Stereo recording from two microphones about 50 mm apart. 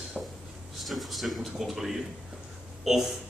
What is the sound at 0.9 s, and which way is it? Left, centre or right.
A man's voice, centre.